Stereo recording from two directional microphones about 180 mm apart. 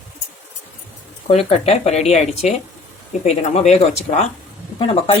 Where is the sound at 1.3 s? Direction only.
35° left (ahead or behind).